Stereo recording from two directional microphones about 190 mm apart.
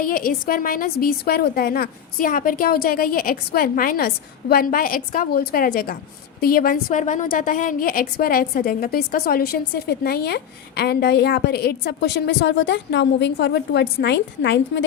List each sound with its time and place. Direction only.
0.0 s a woman's voice: 50° left (ahead or behind); by 14.6 s 65° left (ahead or behind)